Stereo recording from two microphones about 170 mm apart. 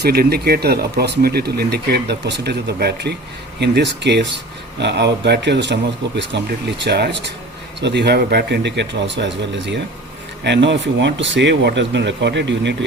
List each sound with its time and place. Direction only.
0.0 s speech: 65° right (ahead or behind)
3.6 s a man's voice: 90° right